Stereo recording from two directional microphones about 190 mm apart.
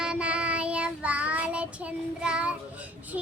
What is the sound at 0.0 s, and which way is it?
Child singing, 5° right (ahead or behind).